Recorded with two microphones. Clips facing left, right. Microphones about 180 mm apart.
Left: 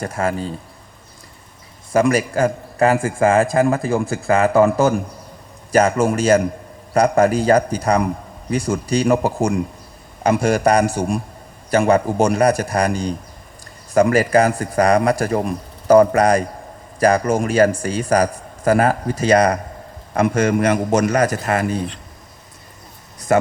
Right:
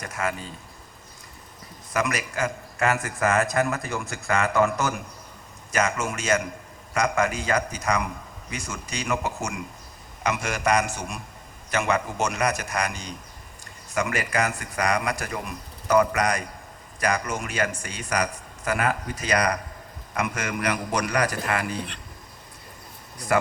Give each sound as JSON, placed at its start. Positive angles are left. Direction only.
{"t": 0.0, "sound": "a man's voice", "side_deg": 30}
{"t": 1.9, "sound": "a man's voice", "side_deg": 30}
{"t": 20.7, "sound": "a man's voice", "side_deg": 45}